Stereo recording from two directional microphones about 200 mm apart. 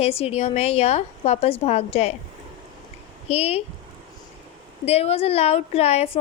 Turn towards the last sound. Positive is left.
turn(degrees=30)  # may be behind; listen again after turning